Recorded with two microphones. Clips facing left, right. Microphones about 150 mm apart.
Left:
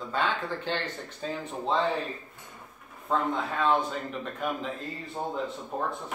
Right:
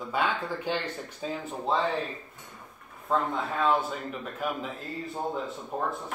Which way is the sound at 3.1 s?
5° right (ahead or behind).